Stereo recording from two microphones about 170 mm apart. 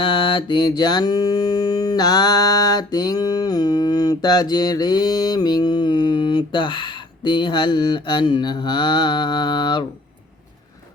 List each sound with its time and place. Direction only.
0.0 s mantra: 30° left (ahead or behind)